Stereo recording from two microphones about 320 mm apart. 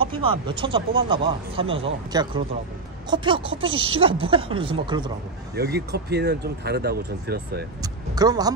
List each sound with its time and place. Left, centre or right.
0.0 s speech: centre
5.6 s speech: right
7.8 s speech: centre